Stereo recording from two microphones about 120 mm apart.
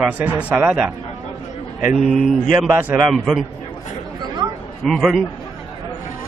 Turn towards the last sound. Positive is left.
turn(degrees=0)  # may be behind; listen again after turning